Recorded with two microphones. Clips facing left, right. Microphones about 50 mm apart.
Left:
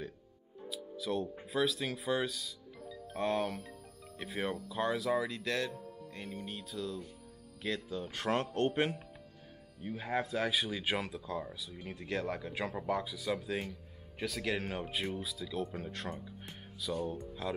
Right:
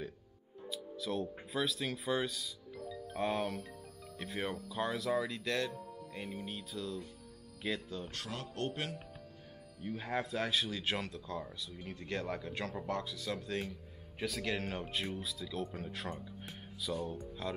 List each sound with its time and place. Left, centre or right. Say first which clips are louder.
0.7 s music: left 2 dB; centre
1.5 s speech: left 4 dB; centre
8.3 s speech: left 10 dB; left
9.8 s speech: left 2 dB; centre